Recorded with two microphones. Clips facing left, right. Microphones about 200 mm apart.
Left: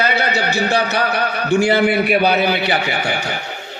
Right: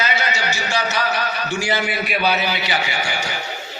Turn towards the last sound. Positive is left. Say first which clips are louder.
# left 5 dB
turn(degrees=55)  # may be behind; listen again after turning